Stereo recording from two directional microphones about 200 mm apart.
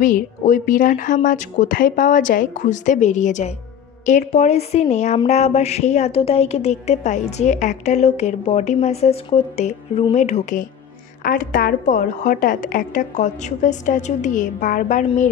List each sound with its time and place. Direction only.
0.0 s a woman's voice: 40° left (ahead or behind)